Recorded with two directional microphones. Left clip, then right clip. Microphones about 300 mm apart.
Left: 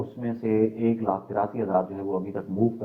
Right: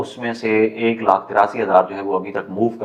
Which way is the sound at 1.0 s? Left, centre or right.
Centre.